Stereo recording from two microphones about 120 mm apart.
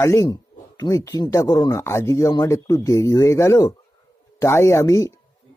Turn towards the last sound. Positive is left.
turn(degrees=25)  # may be behind; listen again after turning